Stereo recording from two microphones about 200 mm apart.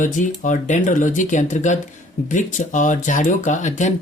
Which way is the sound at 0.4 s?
40° left (ahead or behind).